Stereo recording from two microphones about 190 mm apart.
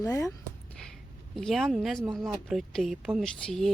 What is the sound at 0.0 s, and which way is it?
Speech, 15° left (ahead or behind).